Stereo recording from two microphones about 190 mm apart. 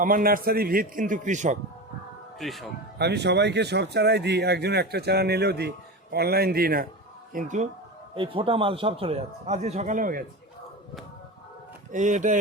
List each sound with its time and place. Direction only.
0.0 s a man's voice: 50° right (ahead or behind)
2.4 s speech: centre (ahead or behind)
3.0 s speech: 60° right (ahead or behind)
7.3 s speech: 40° right (ahead or behind)
8.1 s a man's voice: 25° right (ahead or behind); by 10.2 s 45° right (ahead or behind)
11.9 s speech: 40° right (ahead or behind)